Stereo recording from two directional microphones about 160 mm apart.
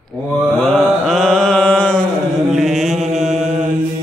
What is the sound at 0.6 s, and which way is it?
Mantra, centre (ahead or behind).